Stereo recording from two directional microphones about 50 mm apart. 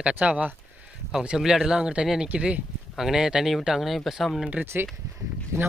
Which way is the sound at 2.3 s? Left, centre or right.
Right.